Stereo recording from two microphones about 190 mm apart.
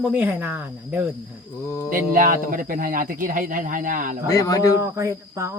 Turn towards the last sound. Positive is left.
turn(degrees=-15)  # may be behind; listen again after turning